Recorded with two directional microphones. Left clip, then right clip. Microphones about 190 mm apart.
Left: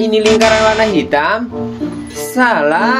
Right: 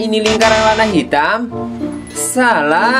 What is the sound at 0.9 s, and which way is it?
Speech, 15° right (ahead or behind).